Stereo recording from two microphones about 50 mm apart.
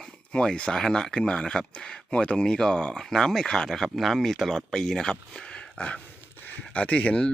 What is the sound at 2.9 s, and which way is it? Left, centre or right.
Speech, centre.